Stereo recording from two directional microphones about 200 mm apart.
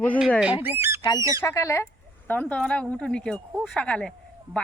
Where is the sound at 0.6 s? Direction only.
10° right (ahead or behind).